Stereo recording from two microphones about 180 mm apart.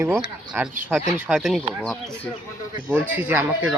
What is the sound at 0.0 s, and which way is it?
Speech, 10° right (ahead or behind).